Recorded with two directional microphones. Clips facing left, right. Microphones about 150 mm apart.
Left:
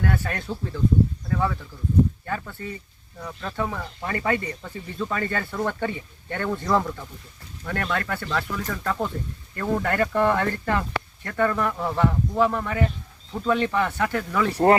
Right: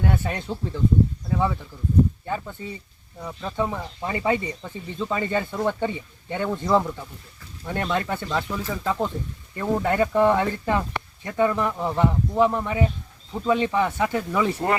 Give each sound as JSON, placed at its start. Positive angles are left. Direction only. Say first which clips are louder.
{"t": 0.0, "sound": "speech", "louder": "right 1 dB", "side_deg": -20}